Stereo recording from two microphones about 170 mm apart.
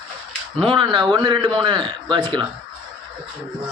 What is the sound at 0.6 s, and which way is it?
A man's voice, 30° right (ahead or behind).